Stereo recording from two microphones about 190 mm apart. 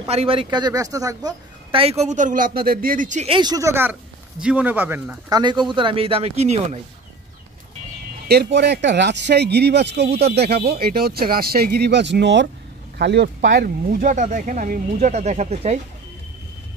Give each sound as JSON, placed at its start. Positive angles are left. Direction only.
{"t": 0.0, "sound": "a man's voice", "side_deg": -30}
{"t": 3.3, "sound": "a man's voice", "side_deg": -25}
{"t": 5.3, "sound": "a man's voice", "side_deg": -25}
{"t": 8.3, "sound": "speech", "side_deg": -60}